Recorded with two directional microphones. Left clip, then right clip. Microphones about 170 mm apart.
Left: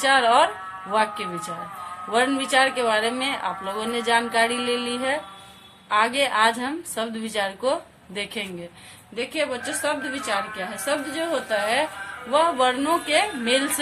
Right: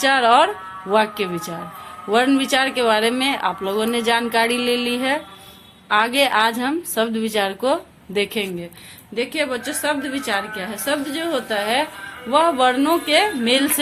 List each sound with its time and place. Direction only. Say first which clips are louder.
0.0 s speech: right 3 dB; 45° right (ahead or behind)